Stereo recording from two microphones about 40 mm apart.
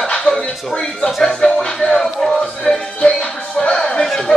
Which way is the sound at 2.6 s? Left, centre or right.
Left.